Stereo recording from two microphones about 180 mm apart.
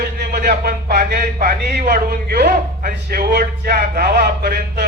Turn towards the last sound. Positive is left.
turn(degrees=-60)  # may be behind; listen again after turning